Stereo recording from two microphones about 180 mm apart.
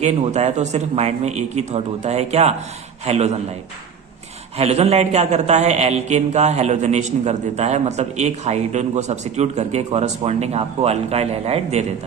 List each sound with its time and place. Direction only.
0.0 s a man's voice: 40° right (ahead or behind)
4.5 s a man's voice: 35° right (ahead or behind)